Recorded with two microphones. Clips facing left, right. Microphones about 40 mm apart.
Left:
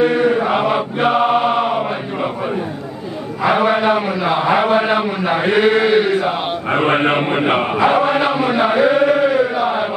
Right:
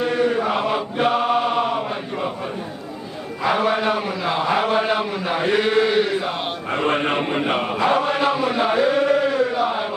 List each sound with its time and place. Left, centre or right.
0.0 s chant: left
3.4 s a man's voice: left
6.7 s a man's voice: left
7.8 s chant: left